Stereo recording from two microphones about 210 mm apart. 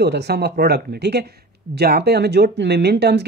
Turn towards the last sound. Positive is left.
turn(degrees=-50)  # may be behind; listen again after turning